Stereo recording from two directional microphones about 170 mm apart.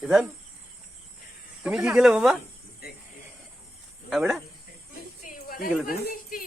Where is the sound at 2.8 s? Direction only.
65° left (ahead or behind).